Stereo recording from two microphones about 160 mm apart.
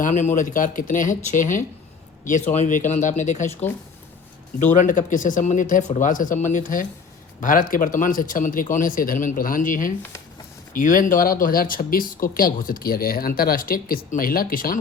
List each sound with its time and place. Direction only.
0.0 s speech: 45° left (ahead or behind)
4.6 s speech: 50° left (ahead or behind)